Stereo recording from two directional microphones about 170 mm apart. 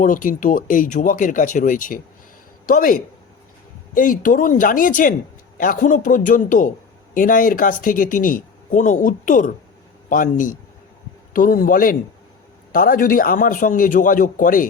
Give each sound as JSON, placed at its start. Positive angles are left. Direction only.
{"t": 0.0, "sound": "a man's voice", "side_deg": 50}